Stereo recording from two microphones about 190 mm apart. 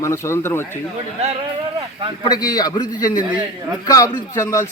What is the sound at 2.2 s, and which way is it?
Speech, 20° left (ahead or behind).